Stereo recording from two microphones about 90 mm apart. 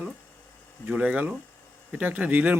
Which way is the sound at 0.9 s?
15° right (ahead or behind).